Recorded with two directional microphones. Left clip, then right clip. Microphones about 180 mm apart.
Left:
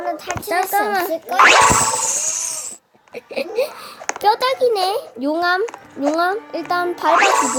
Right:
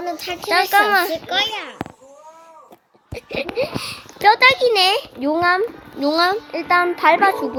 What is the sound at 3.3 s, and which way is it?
A child's voice, 5° left (ahead or behind).